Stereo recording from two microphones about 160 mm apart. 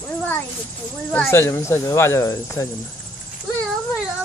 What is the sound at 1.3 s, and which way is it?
Speech, 15° left (ahead or behind).